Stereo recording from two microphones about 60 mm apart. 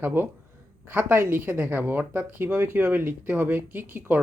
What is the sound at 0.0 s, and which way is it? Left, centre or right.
Speech, right.